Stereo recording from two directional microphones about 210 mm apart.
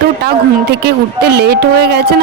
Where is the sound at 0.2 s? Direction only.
50° right (ahead or behind).